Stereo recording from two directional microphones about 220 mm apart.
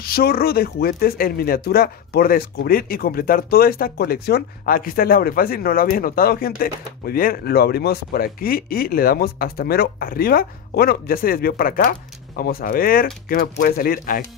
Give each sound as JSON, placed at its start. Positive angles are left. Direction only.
{"t": 0.0, "sound": "speech", "side_deg": 45}